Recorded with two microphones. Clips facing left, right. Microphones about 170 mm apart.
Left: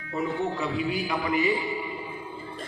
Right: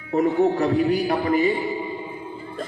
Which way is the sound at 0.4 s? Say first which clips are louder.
Right 12 dB; 60° right (ahead or behind).